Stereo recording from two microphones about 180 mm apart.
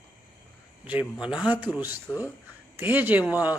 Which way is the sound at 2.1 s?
15° left (ahead or behind).